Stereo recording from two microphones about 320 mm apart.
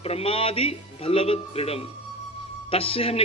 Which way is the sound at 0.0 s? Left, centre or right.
Centre.